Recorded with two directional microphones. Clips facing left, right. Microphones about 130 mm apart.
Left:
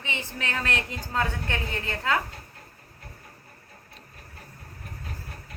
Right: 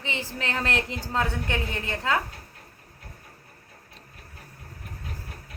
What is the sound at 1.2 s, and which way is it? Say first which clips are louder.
A woman's voice: right 1 dB; 15° right (ahead or behind).